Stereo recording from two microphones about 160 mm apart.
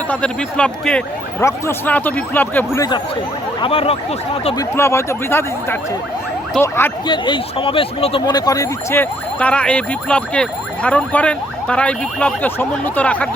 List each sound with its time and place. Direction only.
0.1 s speech: 5° left (ahead or behind)
1.4 s speech: 15° left (ahead or behind)
3.6 s speech: 35° left (ahead or behind)
4.5 s speech: 15° left (ahead or behind)
7.1 s speech: 30° left (ahead or behind); by 13.2 s 10° left (ahead or behind)